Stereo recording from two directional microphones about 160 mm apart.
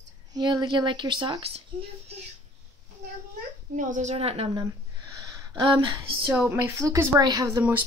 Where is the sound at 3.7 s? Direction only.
50° right (ahead or behind).